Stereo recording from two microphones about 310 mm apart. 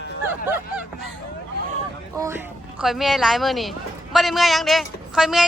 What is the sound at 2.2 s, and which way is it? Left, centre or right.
A woman's voice, centre.